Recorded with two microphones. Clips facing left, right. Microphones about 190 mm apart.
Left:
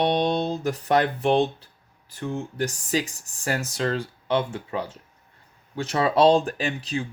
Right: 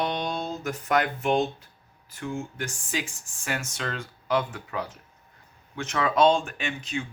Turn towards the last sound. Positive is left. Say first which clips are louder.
# left 4 dB
turn(degrees=35)  # may be behind; listen again after turning